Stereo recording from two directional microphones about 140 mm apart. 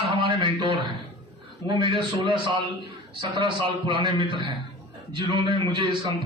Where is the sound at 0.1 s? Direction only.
35° right (ahead or behind).